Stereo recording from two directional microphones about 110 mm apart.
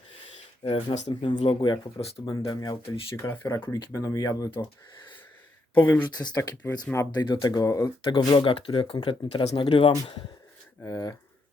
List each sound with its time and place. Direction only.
0.6 s speech: 50° left (ahead or behind)
1.0 s speech: 40° left (ahead or behind)
2.3 s speech: 30° left (ahead or behind)
3.2 s speech: 20° left (ahead or behind)
5.7 s speech: 15° left (ahead or behind)
6.1 s speech: 40° left (ahead or behind)
6.6 s speech: 15° left (ahead or behind)
7.1 s speech: 40° left (ahead or behind)
10.8 s speech: 30° left (ahead or behind)